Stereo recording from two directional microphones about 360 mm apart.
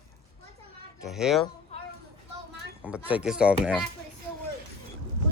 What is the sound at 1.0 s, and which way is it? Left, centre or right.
Speech, centre.